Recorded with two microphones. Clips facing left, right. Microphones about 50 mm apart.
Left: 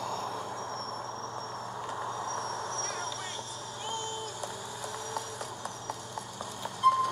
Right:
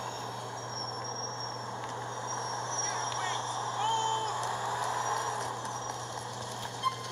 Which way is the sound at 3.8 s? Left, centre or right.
Right.